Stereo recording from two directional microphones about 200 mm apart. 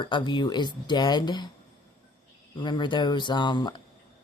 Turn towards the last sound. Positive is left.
turn(degrees=25)  # may be behind; listen again after turning